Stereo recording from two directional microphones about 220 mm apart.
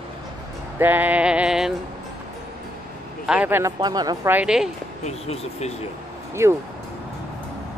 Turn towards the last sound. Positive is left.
turn(degrees=-15)  # may be behind; listen again after turning